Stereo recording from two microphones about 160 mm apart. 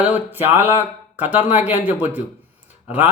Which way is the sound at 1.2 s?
45° left (ahead or behind).